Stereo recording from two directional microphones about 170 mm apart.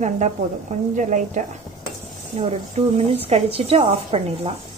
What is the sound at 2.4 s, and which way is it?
A woman's voice, 35° right (ahead or behind).